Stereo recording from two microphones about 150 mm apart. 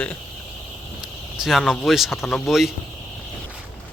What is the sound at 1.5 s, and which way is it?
Speech, centre (ahead or behind).